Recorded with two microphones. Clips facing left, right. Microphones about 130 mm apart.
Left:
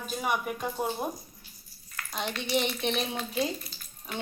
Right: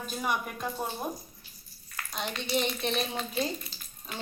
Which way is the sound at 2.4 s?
20° left (ahead or behind).